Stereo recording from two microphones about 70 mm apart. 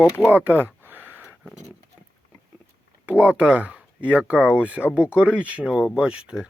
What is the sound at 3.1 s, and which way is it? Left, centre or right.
Speech, centre.